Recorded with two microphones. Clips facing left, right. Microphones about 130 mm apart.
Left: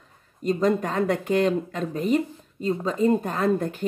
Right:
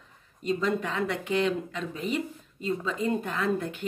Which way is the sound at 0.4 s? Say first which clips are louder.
Left 5 dB; 45° left (ahead or behind).